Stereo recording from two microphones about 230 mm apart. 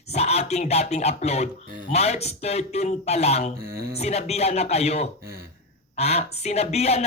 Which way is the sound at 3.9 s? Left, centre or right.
Left.